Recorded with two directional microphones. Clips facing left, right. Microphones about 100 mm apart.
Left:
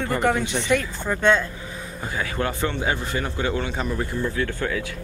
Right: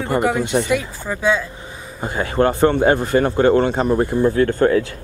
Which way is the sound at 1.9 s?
35° right (ahead or behind).